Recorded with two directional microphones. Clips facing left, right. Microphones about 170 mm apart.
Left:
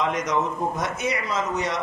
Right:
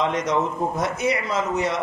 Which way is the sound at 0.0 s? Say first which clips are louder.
Right 2 dB; 30° right (ahead or behind).